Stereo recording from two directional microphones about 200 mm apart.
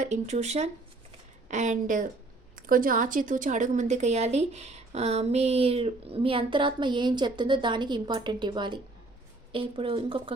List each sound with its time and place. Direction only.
0.0 s a woman's voice: 35° right (ahead or behind)